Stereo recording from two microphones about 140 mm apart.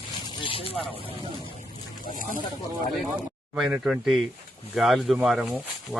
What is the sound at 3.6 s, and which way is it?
Speech, 5° right (ahead or behind).